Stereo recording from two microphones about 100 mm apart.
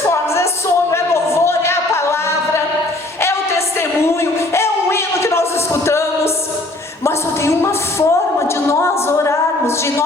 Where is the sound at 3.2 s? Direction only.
25° left (ahead or behind).